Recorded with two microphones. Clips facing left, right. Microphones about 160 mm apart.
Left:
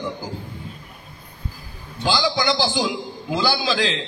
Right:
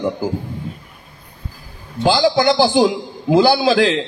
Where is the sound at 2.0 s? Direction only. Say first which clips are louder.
Right 7 dB; 55° right (ahead or behind).